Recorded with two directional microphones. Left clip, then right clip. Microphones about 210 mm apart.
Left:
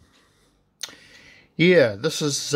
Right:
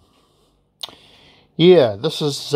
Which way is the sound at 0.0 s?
10° right (ahead or behind).